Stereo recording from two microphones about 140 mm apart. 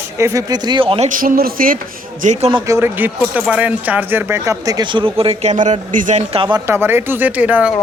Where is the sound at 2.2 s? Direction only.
65° right (ahead or behind).